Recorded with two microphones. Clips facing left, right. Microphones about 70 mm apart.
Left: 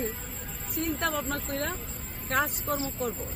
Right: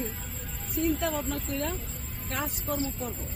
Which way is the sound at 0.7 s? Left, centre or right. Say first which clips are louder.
Right 2 dB; left.